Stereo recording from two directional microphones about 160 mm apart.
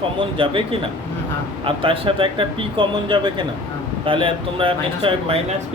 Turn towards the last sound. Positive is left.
turn(degrees=-35)  # may be behind; listen again after turning